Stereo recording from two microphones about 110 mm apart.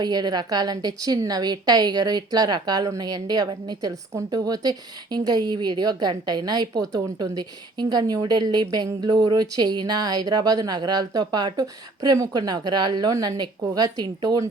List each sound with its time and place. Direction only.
0.0 s a woman's voice: 40° right (ahead or behind)